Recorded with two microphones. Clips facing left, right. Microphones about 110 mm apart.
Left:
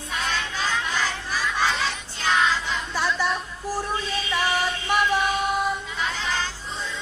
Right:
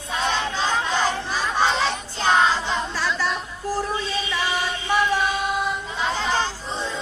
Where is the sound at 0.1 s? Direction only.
30° right (ahead or behind).